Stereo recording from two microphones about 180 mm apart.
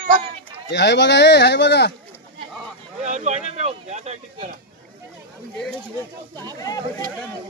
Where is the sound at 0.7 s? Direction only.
70° left (ahead or behind).